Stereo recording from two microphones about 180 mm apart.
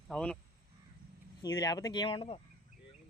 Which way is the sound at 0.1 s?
5° left (ahead or behind).